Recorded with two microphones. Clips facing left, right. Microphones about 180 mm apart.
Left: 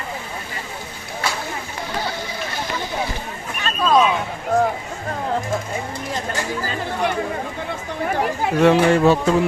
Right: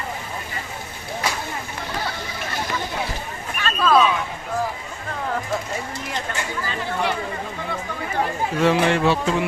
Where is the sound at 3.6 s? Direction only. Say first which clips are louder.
Left 1 dB; 15° left (ahead or behind).